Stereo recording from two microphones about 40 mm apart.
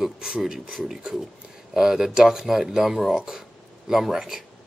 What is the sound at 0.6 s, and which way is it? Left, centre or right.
Speech, centre.